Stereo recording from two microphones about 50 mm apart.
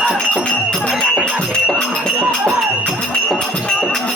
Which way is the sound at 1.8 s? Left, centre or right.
Centre.